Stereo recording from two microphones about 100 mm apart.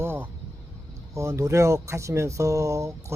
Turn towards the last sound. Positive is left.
turn(degrees=-30)  # may be behind; listen again after turning